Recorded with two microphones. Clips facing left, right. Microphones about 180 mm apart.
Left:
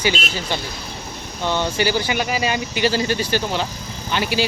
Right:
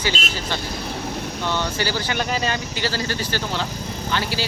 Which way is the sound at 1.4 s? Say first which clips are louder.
Left 5 dB; 15° left (ahead or behind).